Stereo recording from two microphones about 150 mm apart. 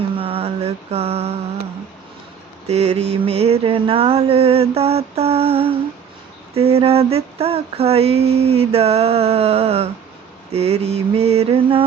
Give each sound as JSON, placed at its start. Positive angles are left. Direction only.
{"t": 0.2, "sound": "mantra", "side_deg": -40}
{"t": 2.6, "sound": "female singing", "side_deg": -45}